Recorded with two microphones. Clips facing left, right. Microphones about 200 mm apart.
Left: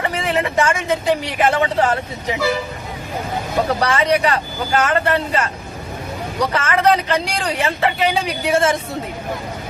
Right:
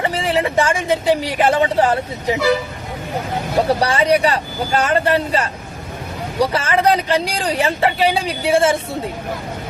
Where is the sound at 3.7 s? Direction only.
30° right (ahead or behind).